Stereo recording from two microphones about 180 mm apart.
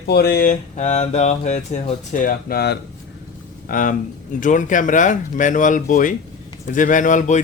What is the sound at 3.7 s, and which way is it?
Speech, 50° left (ahead or behind).